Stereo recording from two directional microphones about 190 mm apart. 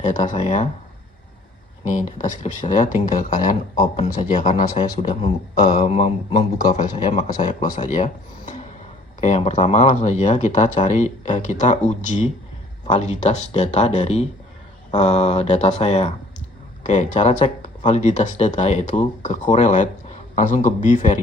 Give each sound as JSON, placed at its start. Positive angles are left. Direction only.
{"t": 0.0, "sound": "speech", "side_deg": 40}
{"t": 1.9, "sound": "speech", "side_deg": 40}
{"t": 9.2, "sound": "speech", "side_deg": 35}